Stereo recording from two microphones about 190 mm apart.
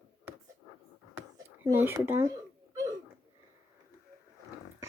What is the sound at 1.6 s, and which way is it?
Speech, 15° right (ahead or behind).